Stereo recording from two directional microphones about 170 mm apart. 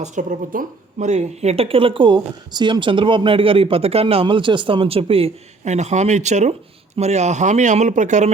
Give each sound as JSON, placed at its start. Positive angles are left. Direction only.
{"t": 0.0, "sound": "a woman's voice", "side_deg": -45}